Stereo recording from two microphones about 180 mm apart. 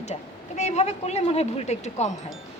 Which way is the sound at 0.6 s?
40° left (ahead or behind).